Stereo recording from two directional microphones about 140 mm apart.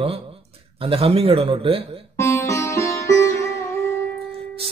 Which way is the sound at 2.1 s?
20° left (ahead or behind).